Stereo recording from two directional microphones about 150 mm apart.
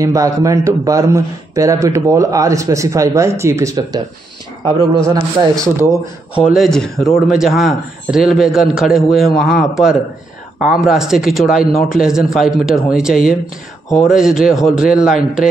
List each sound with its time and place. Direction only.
0.0 s a man's voice: 20° right (ahead or behind)
6.3 s speech: centre (ahead or behind)